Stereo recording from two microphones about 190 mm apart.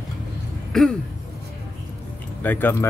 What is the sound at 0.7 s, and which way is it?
Throat clearing, centre (ahead or behind).